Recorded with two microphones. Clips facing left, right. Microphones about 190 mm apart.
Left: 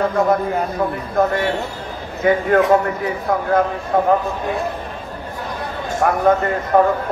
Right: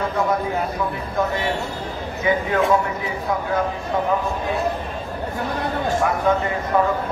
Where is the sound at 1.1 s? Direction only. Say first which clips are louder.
Left 5 dB; 55° left (ahead or behind).